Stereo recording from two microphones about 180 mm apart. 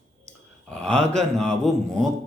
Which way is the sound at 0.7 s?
5° left (ahead or behind).